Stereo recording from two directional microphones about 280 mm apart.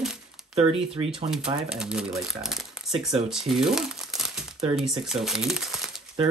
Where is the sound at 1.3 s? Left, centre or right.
Centre.